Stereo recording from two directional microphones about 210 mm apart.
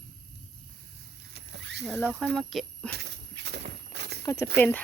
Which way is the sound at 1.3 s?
55° right (ahead or behind).